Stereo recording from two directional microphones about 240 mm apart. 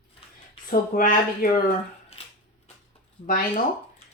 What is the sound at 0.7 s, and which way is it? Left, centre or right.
Speech, left.